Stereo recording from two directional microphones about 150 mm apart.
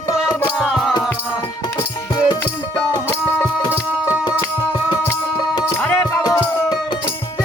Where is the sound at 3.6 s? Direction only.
20° left (ahead or behind).